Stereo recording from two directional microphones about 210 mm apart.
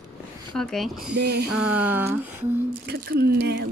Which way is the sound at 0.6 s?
Centre (ahead or behind).